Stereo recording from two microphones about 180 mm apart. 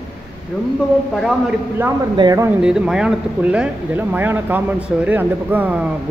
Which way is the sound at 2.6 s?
5° right (ahead or behind).